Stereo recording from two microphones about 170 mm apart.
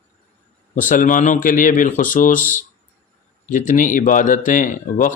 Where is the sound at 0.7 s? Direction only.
50° left (ahead or behind).